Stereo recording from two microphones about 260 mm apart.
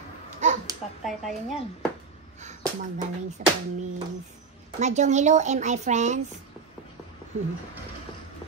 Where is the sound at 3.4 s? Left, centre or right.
Right.